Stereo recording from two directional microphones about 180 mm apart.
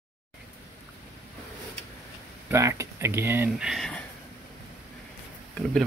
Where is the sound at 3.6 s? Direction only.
Centre (ahead or behind).